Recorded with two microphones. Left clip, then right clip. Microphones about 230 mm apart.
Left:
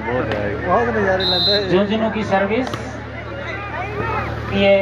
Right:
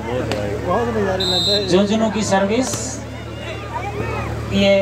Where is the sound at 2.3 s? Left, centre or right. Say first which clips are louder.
Even; right.